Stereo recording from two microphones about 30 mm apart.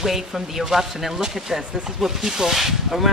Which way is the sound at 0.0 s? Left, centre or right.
Centre.